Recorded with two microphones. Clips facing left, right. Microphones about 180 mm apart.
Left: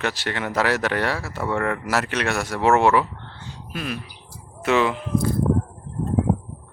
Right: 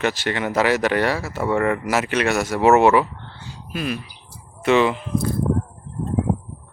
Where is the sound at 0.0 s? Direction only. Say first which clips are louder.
Right 4 dB; centre (ahead or behind).